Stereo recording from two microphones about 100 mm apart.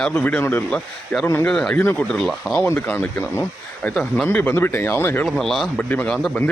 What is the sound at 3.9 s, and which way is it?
Speech, 5° left (ahead or behind).